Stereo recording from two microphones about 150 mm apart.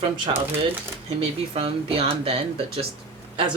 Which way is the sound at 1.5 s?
40° right (ahead or behind).